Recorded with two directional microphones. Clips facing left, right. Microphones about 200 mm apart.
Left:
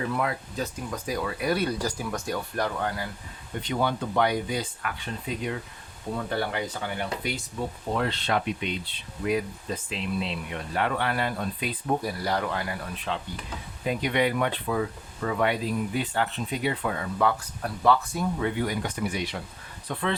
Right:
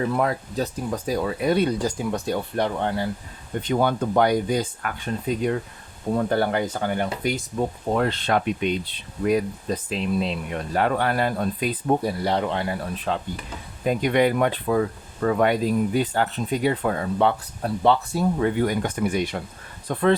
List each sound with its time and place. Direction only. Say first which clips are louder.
0.1 s speech: right 5 dB; 40° right (ahead or behind)
3.6 s speech: right 5 dB; 45° right (ahead or behind)
11.9 s speech: right 5 dB; 30° right (ahead or behind)
17.2 s speech: right 4 dB; 30° right (ahead or behind); by 20.1 s 45° right (ahead or behind)